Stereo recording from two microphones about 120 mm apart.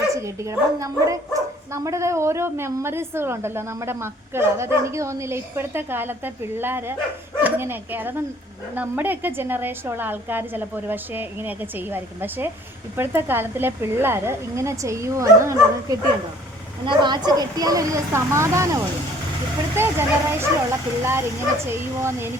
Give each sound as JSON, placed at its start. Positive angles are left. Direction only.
{"t": 0.2, "sound": "a woman's voice", "side_deg": -25}
{"t": 16.8, "sound": "speech", "side_deg": -40}